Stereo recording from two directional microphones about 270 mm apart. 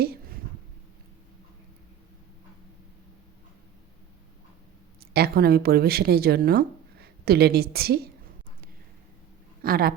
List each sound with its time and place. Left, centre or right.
0.0 s a sound: right
5.1 s speech: right
9.6 s speech: right